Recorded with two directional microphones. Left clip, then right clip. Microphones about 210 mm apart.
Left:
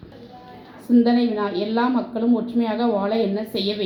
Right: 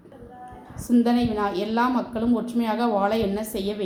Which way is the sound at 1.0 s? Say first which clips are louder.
Left 2 dB; 20° right (ahead or behind).